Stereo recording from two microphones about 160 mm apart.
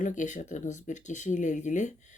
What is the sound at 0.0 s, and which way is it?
A woman's voice, 50° left (ahead or behind).